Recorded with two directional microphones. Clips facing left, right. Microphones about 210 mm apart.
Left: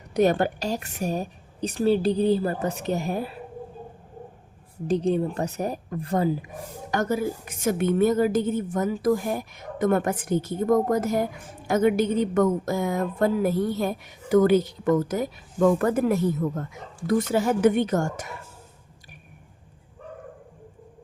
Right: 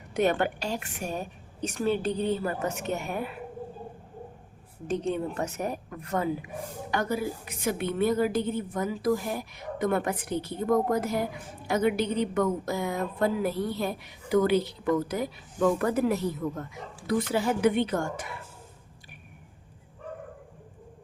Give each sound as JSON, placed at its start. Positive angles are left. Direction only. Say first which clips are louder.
{"t": 0.1, "sound": "a woman's voice", "louder": "left 4 dB", "side_deg": 40}
{"t": 4.9, "sound": "a woman's voice", "louder": "left 6 dB", "side_deg": 35}
{"t": 6.9, "sound": "speech", "louder": "left 4 dB", "side_deg": 45}